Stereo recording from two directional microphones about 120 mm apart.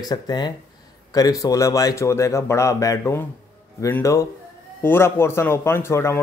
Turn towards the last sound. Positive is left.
turn(degrees=20)  # may be behind; listen again after turning